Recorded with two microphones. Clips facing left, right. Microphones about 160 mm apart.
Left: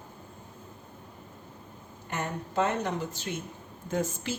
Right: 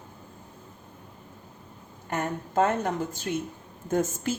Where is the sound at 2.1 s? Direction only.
45° right (ahead or behind).